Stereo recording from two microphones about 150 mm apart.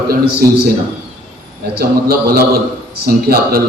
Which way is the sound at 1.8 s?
90° right.